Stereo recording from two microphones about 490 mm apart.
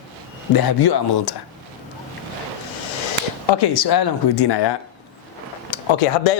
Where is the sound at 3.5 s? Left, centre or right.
Left.